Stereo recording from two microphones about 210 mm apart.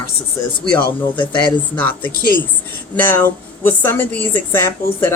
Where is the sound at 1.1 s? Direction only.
20° left (ahead or behind).